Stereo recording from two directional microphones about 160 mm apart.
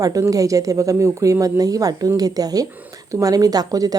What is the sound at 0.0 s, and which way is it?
Speech, 20° right (ahead or behind).